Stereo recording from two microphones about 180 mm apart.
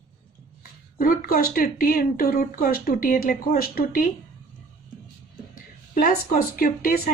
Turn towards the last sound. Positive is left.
turn(degrees=55)  # may be behind; listen again after turning